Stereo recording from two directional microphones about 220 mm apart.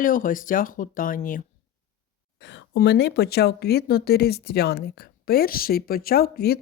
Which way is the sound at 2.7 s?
50° left (ahead or behind).